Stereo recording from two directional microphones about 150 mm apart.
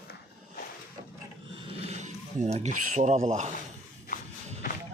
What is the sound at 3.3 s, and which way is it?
Speech, 50° right (ahead or behind).